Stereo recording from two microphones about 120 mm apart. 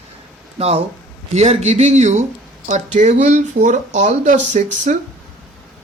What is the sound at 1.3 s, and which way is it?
A man's voice, 65° right (ahead or behind).